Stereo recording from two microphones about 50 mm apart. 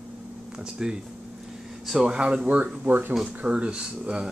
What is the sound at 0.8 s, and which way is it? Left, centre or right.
Speech, centre.